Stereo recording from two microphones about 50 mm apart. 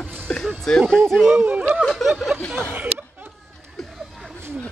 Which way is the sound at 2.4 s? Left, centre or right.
Centre.